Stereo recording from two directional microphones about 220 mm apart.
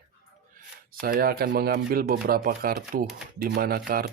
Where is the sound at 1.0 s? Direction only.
40° right (ahead or behind).